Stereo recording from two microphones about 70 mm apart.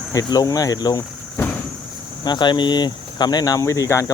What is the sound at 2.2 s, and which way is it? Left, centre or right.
Speech, left.